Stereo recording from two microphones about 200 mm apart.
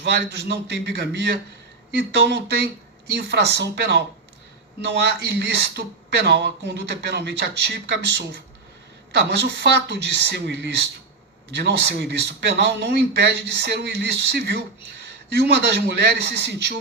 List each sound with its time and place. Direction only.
0.0 s speech: 60° right (ahead or behind)